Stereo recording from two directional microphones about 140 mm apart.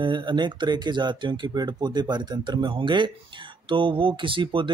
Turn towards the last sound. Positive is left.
turn(degrees=-35)  # may be behind; listen again after turning